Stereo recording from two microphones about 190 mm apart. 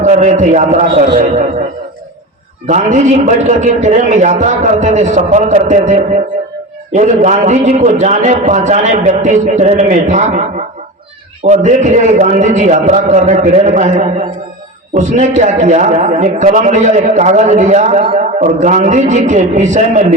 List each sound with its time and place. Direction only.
0.0 s a man's voice: 40° right (ahead or behind)
2.6 s a man's voice: 40° right (ahead or behind)
11.4 s a man's voice: 40° right (ahead or behind)